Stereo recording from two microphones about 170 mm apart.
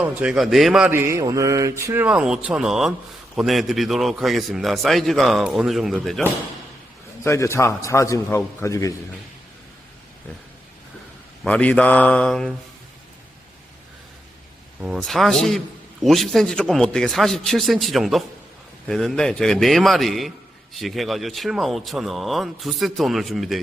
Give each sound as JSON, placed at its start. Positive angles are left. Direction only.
{"t": 0.0, "sound": "speech", "side_deg": -5}
{"t": 7.3, "sound": "a man's voice", "side_deg": 15}
{"t": 11.4, "sound": "a man's voice", "side_deg": 5}
{"t": 14.8, "sound": "speech", "side_deg": 0}